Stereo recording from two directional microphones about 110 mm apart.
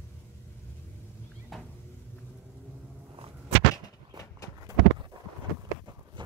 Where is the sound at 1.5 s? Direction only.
Centre (ahead or behind).